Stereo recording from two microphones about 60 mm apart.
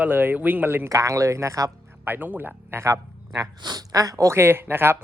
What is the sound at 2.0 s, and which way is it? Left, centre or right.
Speech, right.